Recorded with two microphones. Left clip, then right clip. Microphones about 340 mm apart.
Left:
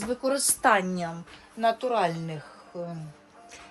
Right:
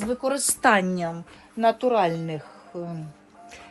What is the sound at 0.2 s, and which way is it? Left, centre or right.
A woman's voice, centre.